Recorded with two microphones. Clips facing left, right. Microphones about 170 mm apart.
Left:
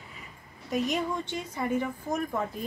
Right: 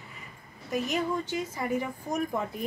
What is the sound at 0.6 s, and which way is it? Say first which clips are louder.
A woman's voice: even; centre (ahead or behind).